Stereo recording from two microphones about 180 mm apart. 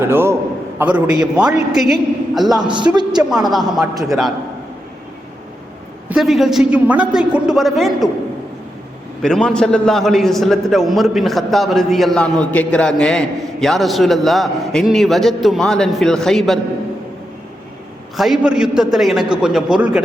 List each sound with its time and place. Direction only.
0.0 s a man's voice: 15° right (ahead or behind)
2.6 s a woman's voice: 25° right (ahead or behind)
3.2 s a man's voice: centre (ahead or behind)
6.1 s a man's voice: centre (ahead or behind)
9.2 s a man's voice: 5° left (ahead or behind)
18.2 s a man's voice: 5° right (ahead or behind)